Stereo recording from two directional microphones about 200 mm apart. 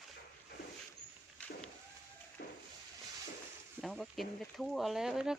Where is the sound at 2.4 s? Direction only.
50° left (ahead or behind).